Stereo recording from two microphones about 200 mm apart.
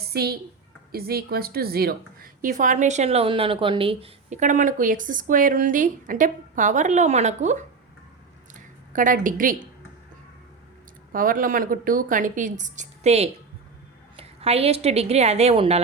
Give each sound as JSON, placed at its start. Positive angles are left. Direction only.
{"t": 0.1, "sound": "a woman's voice", "side_deg": -50}
{"t": 8.5, "sound": "a sound", "side_deg": -40}
{"t": 11.1, "sound": "a woman's voice", "side_deg": -45}